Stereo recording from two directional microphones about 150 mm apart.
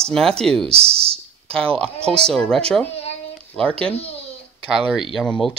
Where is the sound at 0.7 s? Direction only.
40° right (ahead or behind).